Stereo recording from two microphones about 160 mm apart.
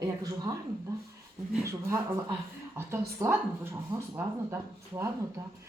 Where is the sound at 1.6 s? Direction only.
15° right (ahead or behind).